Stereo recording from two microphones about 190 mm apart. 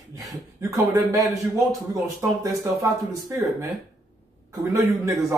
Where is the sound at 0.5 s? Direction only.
15° right (ahead or behind).